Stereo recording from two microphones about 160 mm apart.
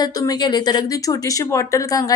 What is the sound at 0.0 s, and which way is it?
A woman's voice, 25° left (ahead or behind).